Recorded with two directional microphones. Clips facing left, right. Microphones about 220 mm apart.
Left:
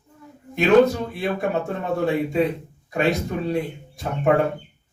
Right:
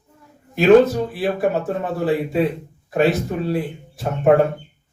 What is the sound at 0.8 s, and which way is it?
Speech, 5° right (ahead or behind).